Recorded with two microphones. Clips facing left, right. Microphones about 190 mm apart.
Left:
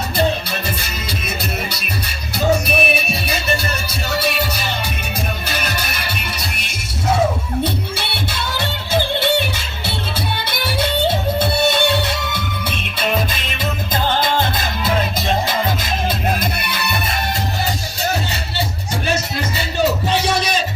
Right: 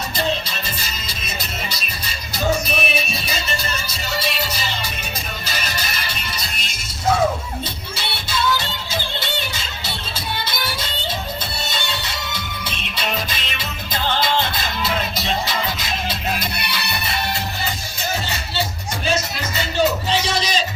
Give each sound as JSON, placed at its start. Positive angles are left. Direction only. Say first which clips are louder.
{"t": 0.2, "sound": "music", "louder": "left 5 dB", "side_deg": 60}
{"t": 2.6, "sound": "music", "louder": "left 5 dB", "side_deg": 60}
{"t": 20.1, "sound": "a sound", "louder": "left 3 dB", "side_deg": 55}